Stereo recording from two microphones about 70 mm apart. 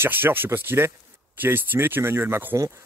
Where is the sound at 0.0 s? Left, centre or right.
Right.